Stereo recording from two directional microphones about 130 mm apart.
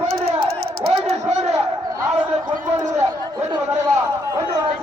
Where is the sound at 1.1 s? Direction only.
55° right (ahead or behind).